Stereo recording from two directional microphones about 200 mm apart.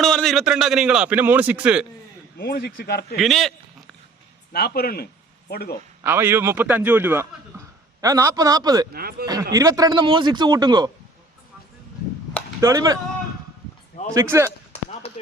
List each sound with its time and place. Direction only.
0.0 s a man's voice: centre (ahead or behind)
2.4 s speech: 50° left (ahead or behind)
3.2 s speech: centre (ahead or behind)
4.5 s speech: 50° left (ahead or behind)
6.0 s a man's voice: 10° right (ahead or behind)
8.9 s a man's voice: 50° right (ahead or behind)
9.2 s speech: 20° right (ahead or behind)
12.5 s speech: 15° right (ahead or behind)
14.1 s a man's voice: 15° right (ahead or behind)